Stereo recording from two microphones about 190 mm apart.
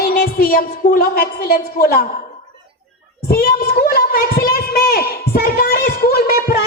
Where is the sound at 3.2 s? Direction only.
50° left (ahead or behind).